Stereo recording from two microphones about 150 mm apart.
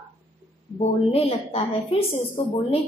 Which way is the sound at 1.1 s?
40° left (ahead or behind).